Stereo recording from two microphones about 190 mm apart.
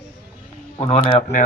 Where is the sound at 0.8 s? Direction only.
35° left (ahead or behind).